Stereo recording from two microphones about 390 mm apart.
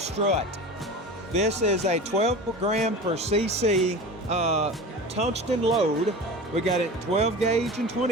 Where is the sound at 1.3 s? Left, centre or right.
Centre.